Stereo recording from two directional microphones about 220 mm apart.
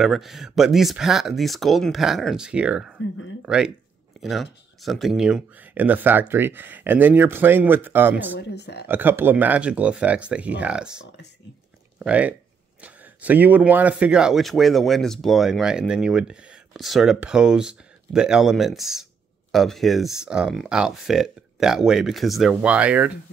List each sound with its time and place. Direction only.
0.0 s speech: centre (ahead or behind)
8.4 s speech: 50° left (ahead or behind)
8.8 s speech: 10° right (ahead or behind)
12.0 s speech: 5° right (ahead or behind)